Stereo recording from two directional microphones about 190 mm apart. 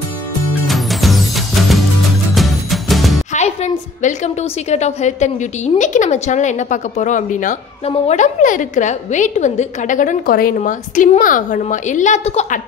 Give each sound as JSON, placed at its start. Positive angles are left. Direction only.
{"t": 0.7, "sound": "music", "side_deg": 0}
{"t": 3.3, "sound": "a woman's voice", "side_deg": 35}